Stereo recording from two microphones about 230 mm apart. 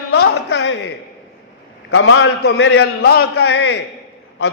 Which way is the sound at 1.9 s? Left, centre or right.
Left.